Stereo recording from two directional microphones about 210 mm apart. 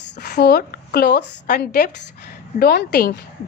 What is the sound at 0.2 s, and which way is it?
A woman's voice, 50° left (ahead or behind).